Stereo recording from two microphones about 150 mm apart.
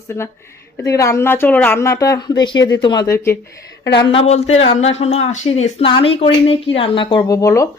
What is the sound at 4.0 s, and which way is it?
A woman's voice, 35° left (ahead or behind).